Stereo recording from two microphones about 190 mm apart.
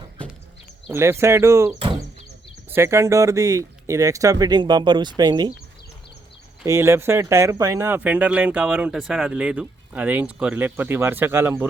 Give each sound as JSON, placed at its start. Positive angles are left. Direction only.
{"t": 0.9, "sound": "speech", "side_deg": -15}
{"t": 1.8, "sound": "a sound", "side_deg": -25}
{"t": 2.6, "sound": "speech", "side_deg": -15}
{"t": 6.7, "sound": "speech", "side_deg": -15}